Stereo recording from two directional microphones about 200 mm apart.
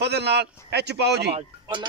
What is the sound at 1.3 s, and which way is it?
Speech, 25° right (ahead or behind).